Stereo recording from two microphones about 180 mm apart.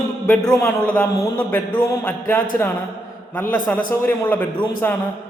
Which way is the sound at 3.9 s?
10° left (ahead or behind).